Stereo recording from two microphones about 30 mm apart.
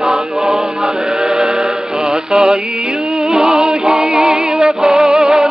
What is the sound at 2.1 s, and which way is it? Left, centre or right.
Music, right.